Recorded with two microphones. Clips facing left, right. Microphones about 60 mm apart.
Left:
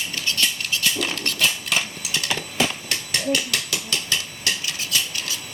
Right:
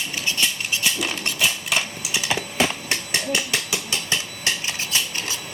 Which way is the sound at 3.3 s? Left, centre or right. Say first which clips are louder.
Left 1 dB; centre.